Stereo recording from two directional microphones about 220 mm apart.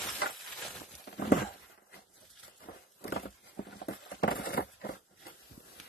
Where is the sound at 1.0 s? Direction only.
50° left (ahead or behind).